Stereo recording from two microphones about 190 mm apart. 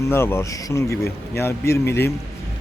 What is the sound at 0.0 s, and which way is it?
Speech, 15° left (ahead or behind).